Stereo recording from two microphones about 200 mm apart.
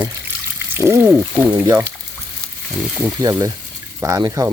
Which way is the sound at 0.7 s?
10° right (ahead or behind).